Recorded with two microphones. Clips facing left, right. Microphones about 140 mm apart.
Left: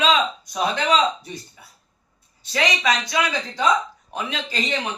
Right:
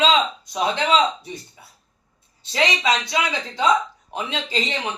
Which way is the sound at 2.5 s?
25° right (ahead or behind).